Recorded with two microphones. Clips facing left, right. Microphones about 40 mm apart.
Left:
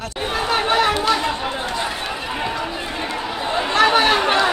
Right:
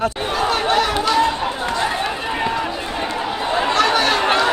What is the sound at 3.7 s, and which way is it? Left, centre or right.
Chatter, centre.